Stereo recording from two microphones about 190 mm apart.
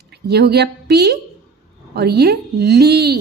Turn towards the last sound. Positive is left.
turn(degrees=-60)  # may be behind; listen again after turning